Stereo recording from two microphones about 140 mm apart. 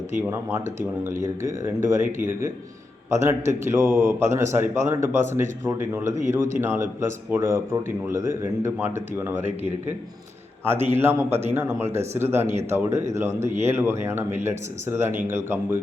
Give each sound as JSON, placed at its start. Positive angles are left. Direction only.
{"t": 0.2, "sound": "a man's voice", "side_deg": -20}